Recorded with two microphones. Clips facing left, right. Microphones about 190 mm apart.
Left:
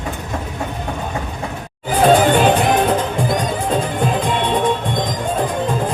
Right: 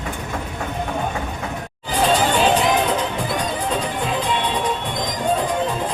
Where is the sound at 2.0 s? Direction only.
55° left (ahead or behind).